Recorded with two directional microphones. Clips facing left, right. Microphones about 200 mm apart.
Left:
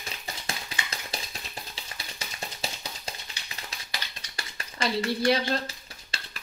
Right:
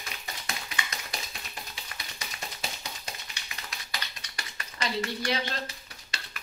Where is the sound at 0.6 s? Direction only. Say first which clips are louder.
Left 1 dB; 30° left (ahead or behind).